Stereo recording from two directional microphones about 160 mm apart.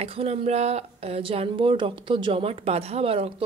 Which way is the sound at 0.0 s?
40° right (ahead or behind).